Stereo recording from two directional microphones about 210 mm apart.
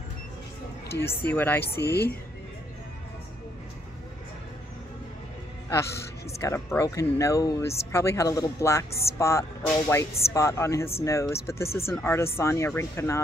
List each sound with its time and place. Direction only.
1.0 s speech: 10° left (ahead or behind)
1.8 s speech: 50° left (ahead or behind)
6.4 s speech: 15° left (ahead or behind)